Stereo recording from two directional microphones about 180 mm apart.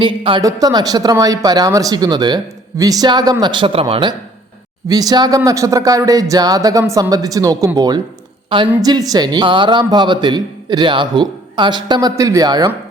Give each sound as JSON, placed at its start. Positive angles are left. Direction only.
{"t": 0.2, "sound": "speech", "side_deg": -25}
{"t": 4.9, "sound": "speech", "side_deg": -20}